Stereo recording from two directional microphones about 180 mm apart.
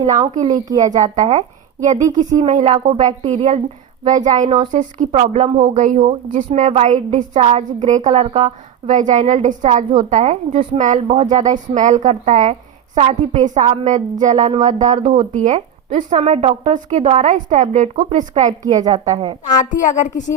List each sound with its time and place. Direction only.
0.4 s a woman's voice: 20° right (ahead or behind)
1.2 s a woman's voice: 45° right (ahead or behind)
18.6 s a woman's voice: 20° right (ahead or behind)
19.5 s a woman's voice: 40° left (ahead or behind)